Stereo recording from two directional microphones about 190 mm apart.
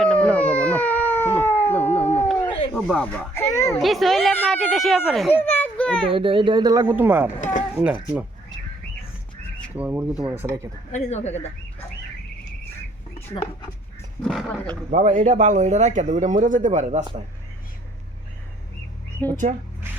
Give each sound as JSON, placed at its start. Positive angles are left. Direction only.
{"t": 0.0, "sound": "a sound", "side_deg": 5}
{"t": 2.7, "sound": "speech", "side_deg": 5}
{"t": 3.5, "sound": "a sound", "side_deg": 15}
{"t": 3.8, "sound": "speech", "side_deg": 0}
{"t": 5.4, "sound": "children playing", "side_deg": 10}
{"t": 6.1, "sound": "speech", "side_deg": -30}
{"t": 9.7, "sound": "speech", "side_deg": -10}
{"t": 10.9, "sound": "speech", "side_deg": 35}
{"t": 13.1, "sound": "speech", "side_deg": 30}
{"t": 14.2, "sound": "speech", "side_deg": 0}
{"t": 14.8, "sound": "speech", "side_deg": -40}
{"t": 19.2, "sound": "speech", "side_deg": 10}